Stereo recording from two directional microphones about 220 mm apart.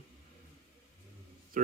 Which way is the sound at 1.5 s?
35° right (ahead or behind).